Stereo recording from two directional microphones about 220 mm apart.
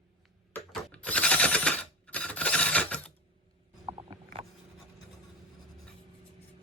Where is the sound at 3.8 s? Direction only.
20° right (ahead or behind).